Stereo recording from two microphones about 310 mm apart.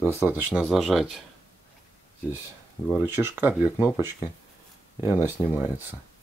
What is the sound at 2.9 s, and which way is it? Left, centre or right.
Speech, centre.